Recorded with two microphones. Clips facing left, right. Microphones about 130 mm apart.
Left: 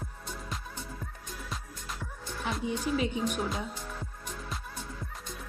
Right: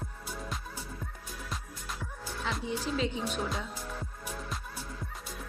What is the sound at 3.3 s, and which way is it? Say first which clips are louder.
Music: left 1 dB; centre (ahead or behind).